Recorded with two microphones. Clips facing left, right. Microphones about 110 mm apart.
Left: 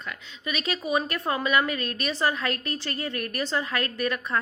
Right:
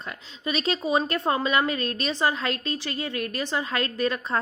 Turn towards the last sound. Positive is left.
turn(degrees=-25)  # may be behind; listen again after turning